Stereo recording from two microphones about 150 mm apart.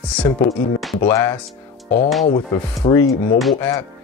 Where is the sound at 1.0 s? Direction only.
15° left (ahead or behind).